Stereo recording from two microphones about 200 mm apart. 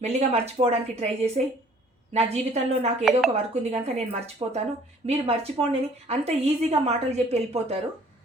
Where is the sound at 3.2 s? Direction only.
30° right (ahead or behind).